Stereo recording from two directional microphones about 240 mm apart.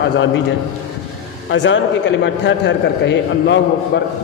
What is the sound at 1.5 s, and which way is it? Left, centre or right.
A man's voice, left.